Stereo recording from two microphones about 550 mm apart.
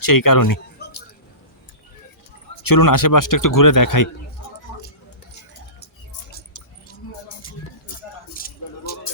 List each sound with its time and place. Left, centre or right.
0.0 s speech: left
0.8 s a sound: centre
2.6 s speech: left
8.3 s keys jangling: centre